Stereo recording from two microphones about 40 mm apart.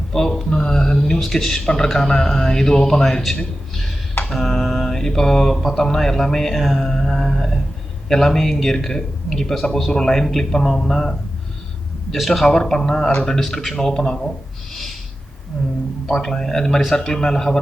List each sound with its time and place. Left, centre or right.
0.1 s speech: centre
1.2 s speech: centre
12.5 s speech: centre
15.6 s speech: centre